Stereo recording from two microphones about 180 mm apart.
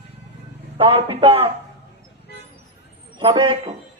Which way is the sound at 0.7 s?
35° right (ahead or behind).